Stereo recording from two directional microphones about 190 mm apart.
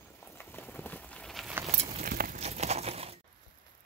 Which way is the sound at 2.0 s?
50° right (ahead or behind).